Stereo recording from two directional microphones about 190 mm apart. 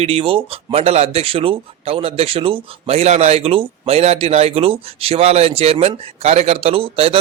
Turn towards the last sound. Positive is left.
turn(degrees=-30)  # may be behind; listen again after turning